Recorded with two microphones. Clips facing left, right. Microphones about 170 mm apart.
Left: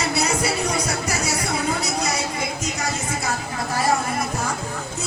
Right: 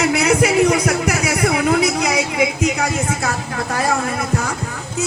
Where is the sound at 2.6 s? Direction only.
65° right (ahead or behind).